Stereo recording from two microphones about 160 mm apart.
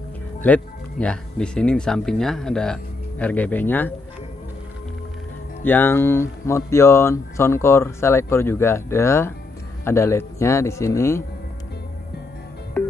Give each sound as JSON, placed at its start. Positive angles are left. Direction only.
{"t": 0.4, "sound": "speech", "side_deg": 10}
{"t": 5.6, "sound": "speech", "side_deg": 10}